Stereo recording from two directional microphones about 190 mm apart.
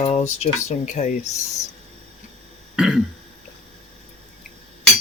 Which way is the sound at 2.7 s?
5° right (ahead or behind).